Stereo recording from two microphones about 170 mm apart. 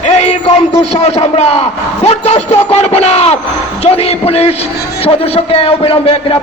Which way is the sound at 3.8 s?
35° left (ahead or behind).